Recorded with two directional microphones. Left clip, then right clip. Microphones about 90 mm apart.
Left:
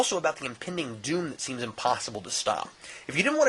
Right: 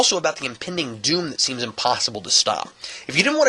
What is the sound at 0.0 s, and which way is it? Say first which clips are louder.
Speech: right 7 dB; 15° right (ahead or behind).